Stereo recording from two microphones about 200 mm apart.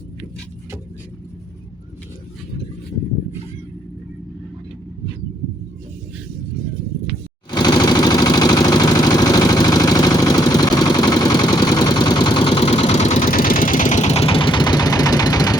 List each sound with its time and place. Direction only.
7.5 s vehicle: 20° left (ahead or behind)